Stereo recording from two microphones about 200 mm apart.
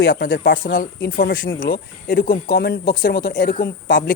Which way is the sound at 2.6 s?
55° left (ahead or behind).